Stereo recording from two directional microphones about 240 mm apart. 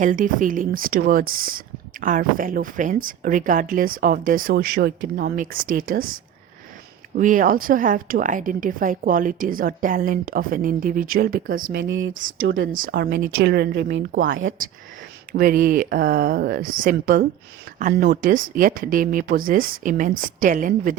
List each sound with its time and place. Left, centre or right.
0.0 s a woman's voice: right
7.2 s a woman's voice: right
11.6 s speech: right
12.6 s a woman's voice: right
14.2 s speech: right
15.3 s a woman's voice: right